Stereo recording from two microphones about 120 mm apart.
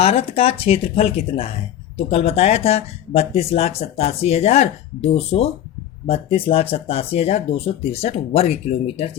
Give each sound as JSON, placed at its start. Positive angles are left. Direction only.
{"t": 0.0, "sound": "speech", "side_deg": 55}